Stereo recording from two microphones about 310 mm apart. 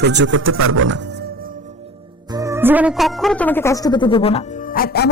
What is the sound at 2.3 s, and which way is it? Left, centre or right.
Speech, centre.